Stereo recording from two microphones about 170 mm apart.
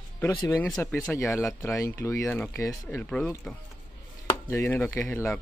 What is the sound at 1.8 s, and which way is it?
Speech, 15° left (ahead or behind).